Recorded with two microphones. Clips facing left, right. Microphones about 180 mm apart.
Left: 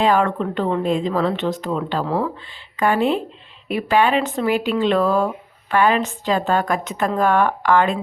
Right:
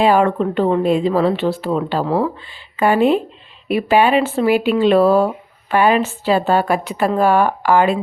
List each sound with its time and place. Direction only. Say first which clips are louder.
0.0 s a woman's voice: right 4 dB; 15° right (ahead or behind)
5.0 s speech: right 5 dB; 35° right (ahead or behind)
5.7 s a woman's voice: right 3 dB; 15° right (ahead or behind)